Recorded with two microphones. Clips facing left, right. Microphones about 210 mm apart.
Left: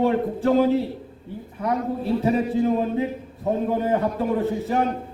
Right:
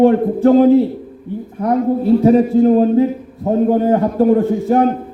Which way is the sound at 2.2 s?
55° right (ahead or behind).